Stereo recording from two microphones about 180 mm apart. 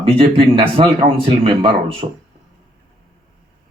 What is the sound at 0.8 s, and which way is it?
Speech, 35° right (ahead or behind).